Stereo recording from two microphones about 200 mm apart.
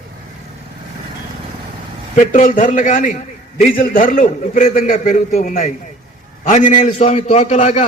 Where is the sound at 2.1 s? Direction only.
40° left (ahead or behind).